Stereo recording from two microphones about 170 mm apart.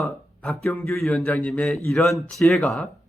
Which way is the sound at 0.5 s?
15° left (ahead or behind).